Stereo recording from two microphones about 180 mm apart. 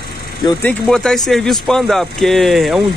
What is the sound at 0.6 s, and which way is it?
Speech, 5° left (ahead or behind).